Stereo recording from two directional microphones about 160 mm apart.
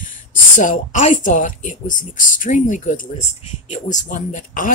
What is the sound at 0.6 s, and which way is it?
Speech, 55° left (ahead or behind).